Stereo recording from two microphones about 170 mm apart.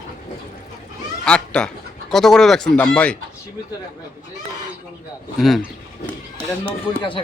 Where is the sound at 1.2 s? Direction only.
5° left (ahead or behind).